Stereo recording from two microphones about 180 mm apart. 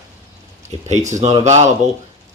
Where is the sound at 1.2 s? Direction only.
35° right (ahead or behind).